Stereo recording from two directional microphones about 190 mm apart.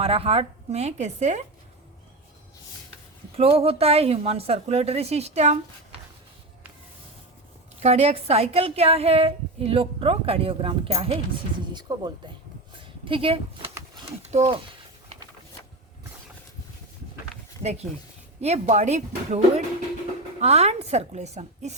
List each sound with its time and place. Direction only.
0.0 s a woman's voice: 30° right (ahead or behind)
3.3 s a woman's voice: 30° right (ahead or behind)
7.8 s a woman's voice: 35° right (ahead or behind)
11.7 s a sound: 20° right (ahead or behind)
17.6 s a woman's voice: 35° right (ahead or behind)